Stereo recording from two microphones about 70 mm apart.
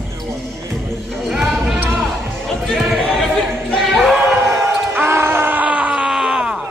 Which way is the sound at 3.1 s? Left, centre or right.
Centre.